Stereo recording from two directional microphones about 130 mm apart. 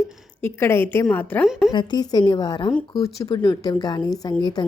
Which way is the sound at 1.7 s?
35° left (ahead or behind).